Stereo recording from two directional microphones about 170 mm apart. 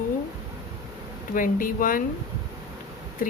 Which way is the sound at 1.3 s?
50° left (ahead or behind).